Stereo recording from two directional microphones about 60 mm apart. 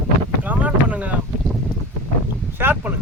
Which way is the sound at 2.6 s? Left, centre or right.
Right.